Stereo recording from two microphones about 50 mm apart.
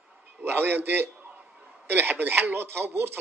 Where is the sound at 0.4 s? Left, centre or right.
Right.